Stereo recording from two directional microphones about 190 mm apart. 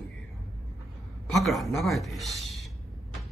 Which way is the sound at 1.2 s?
Centre (ahead or behind).